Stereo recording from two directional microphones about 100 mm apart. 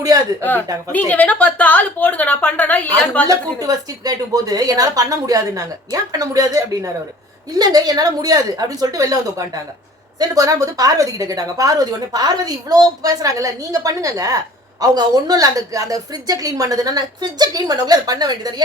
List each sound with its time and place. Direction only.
0.9 s a woman's voice: 15° left (ahead or behind)
3.2 s speech: 40° right (ahead or behind)
10.2 s speech: 35° right (ahead or behind)